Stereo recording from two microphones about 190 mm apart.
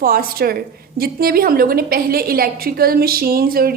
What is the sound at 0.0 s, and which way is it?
A woman's voice, 50° right (ahead or behind).